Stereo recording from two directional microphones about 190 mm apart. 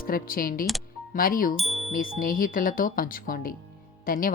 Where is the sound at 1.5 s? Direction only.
Centre (ahead or behind).